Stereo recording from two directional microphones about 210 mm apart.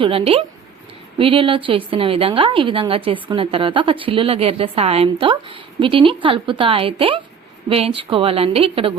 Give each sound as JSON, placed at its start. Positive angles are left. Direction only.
{"t": 0.0, "sound": "a woman's voice", "side_deg": -25}